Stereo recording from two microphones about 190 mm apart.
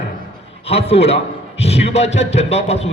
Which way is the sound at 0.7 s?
30° left (ahead or behind).